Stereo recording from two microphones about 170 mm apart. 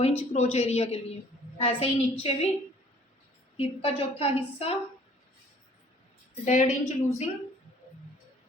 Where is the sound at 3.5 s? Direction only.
35° left (ahead or behind).